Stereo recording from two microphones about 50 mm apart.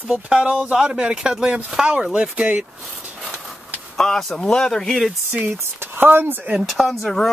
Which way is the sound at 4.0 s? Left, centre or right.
Centre.